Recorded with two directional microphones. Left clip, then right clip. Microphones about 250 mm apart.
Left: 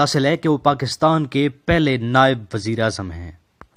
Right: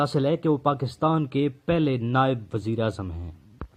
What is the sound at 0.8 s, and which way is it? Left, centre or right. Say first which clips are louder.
Speech: left 7 dB; left.